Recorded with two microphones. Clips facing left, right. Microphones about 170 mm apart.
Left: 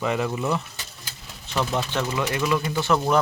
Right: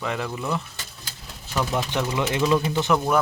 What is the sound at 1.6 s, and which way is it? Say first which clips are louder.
Speech: even; 15° right (ahead or behind).